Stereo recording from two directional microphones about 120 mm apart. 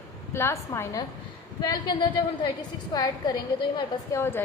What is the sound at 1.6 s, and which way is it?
A woman's voice, 35° left (ahead or behind).